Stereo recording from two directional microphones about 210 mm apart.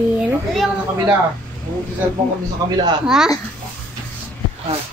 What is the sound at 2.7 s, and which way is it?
Speech, 20° right (ahead or behind).